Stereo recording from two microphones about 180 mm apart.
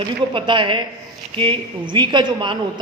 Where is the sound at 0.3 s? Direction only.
25° right (ahead or behind).